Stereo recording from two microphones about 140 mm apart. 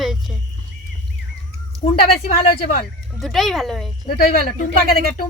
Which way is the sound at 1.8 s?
50° left (ahead or behind).